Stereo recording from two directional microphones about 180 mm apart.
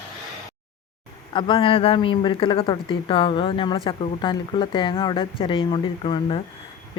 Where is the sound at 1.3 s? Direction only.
25° left (ahead or behind).